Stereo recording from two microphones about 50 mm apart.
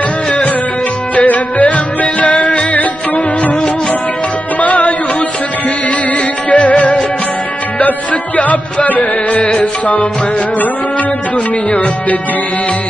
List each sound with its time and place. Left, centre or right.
1.1 s music: left
4.6 s music: left
6.5 s music: left
11.7 s speech: left